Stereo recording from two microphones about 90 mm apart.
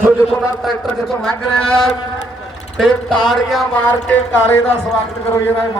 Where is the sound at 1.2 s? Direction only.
10° left (ahead or behind).